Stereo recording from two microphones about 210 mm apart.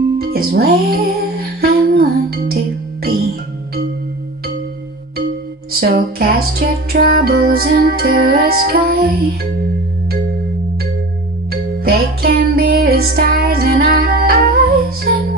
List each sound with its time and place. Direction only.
0.2 s music: 45° right (ahead or behind)
5.7 s music: 45° right (ahead or behind)
11.8 s music: 45° right (ahead or behind)